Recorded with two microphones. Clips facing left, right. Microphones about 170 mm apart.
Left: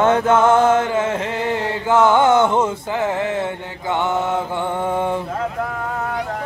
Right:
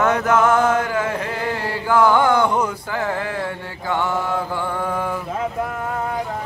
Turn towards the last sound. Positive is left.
turn(degrees=25)  # may be behind; listen again after turning